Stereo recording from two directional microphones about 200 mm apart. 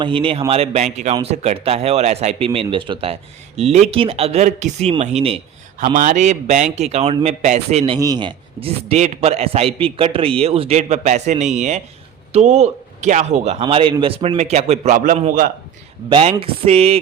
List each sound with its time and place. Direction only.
0.0 s a man's voice: 25° right (ahead or behind)
7.9 s a man's voice: 20° right (ahead or behind); by 15.5 s 45° right (ahead or behind)
16.0 s speech: 25° right (ahead or behind)